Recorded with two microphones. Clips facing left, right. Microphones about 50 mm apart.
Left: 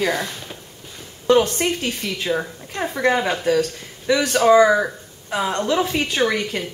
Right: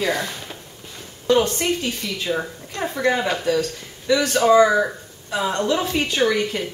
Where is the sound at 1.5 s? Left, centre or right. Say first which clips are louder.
Even; left.